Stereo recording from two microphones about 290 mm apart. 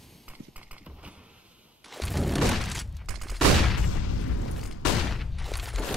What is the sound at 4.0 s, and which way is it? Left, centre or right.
Boom, left.